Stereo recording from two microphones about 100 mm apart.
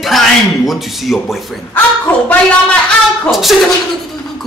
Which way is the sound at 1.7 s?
15° left (ahead or behind).